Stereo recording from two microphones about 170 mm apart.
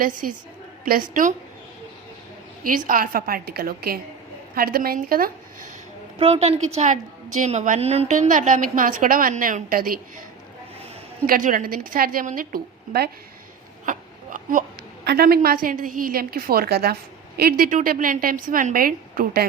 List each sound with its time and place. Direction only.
0.0 s a woman's voice: 50° right (ahead or behind)
2.6 s a woman's voice: 50° right (ahead or behind)
6.1 s a woman's voice: 35° right (ahead or behind); by 10.0 s 55° right (ahead or behind)
11.3 s a woman's voice: 50° right (ahead or behind)
13.8 s a sound: 50° right (ahead or behind)
15.0 s a woman's voice: 70° right (ahead or behind)
15.4 s a woman's voice: 55° right (ahead or behind)